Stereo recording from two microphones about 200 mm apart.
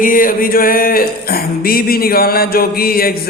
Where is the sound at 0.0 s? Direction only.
45° left (ahead or behind).